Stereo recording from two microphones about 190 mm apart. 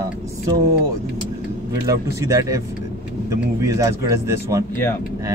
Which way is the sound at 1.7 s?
15° right (ahead or behind).